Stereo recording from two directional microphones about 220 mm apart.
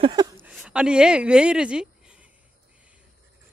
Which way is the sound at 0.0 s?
20° right (ahead or behind).